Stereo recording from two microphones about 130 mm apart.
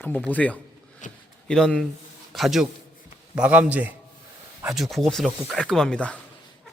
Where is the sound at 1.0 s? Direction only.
75° left (ahead or behind).